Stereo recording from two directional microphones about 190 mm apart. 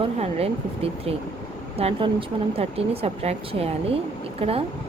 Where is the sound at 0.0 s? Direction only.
30° right (ahead or behind).